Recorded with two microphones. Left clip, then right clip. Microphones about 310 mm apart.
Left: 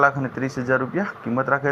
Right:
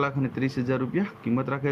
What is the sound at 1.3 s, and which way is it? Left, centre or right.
Speech, centre.